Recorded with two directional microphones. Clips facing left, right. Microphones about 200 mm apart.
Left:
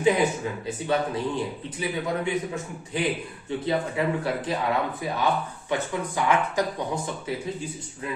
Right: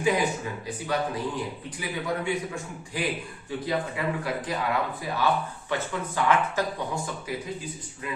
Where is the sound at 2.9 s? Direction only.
25° left (ahead or behind).